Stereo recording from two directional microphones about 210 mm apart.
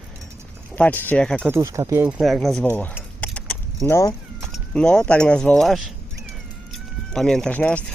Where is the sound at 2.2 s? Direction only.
Centre (ahead or behind).